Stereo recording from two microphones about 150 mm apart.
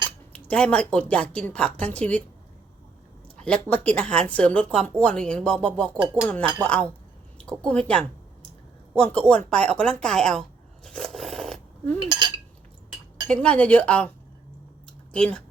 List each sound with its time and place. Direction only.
0.3 s speech: 10° left (ahead or behind)
3.3 s speech: 5° left (ahead or behind)
10.8 s a sound: centre (ahead or behind)
12.0 s speech: 30° right (ahead or behind)
13.2 s speech: 5° left (ahead or behind)
15.1 s speech: 5° left (ahead or behind)